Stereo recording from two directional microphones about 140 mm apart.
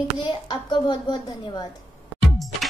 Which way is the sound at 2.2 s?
Centre (ahead or behind).